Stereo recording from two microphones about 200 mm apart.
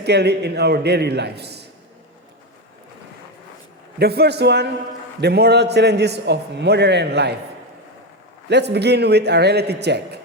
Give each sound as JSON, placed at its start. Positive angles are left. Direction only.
{"t": 0.0, "sound": "a man's voice", "side_deg": -55}
{"t": 3.9, "sound": "a man's voice", "side_deg": -55}
{"t": 8.4, "sound": "a man's voice", "side_deg": -55}